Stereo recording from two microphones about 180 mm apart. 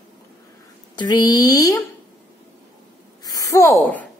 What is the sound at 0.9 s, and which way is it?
Speech, 25° left (ahead or behind).